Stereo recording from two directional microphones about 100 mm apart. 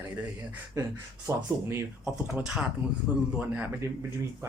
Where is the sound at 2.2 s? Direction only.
10° right (ahead or behind).